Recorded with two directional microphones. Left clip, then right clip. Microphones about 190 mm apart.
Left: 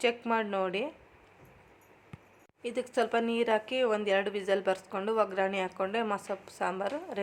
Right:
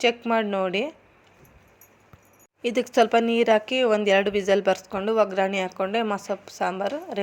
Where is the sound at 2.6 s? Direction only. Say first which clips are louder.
Right 10 dB; 30° right (ahead or behind).